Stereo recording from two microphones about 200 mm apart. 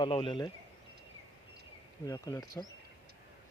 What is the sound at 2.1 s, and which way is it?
Speech, 15° left (ahead or behind).